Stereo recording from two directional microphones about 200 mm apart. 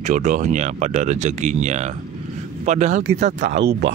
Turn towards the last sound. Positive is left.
turn(degrees=-60)  # may be behind; listen again after turning